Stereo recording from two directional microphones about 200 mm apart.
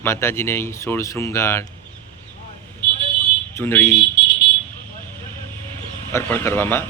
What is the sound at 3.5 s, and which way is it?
Speech, 10° left (ahead or behind).